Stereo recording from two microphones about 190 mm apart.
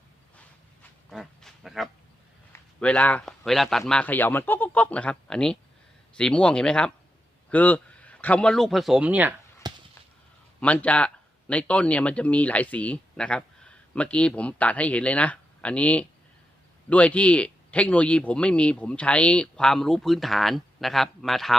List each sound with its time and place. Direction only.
0.3 s a sound: 5° left (ahead or behind)
2.5 s a man's voice: 5° left (ahead or behind)
9.6 s basketball bounce: 20° right (ahead or behind)
10.6 s speech: 5° left (ahead or behind)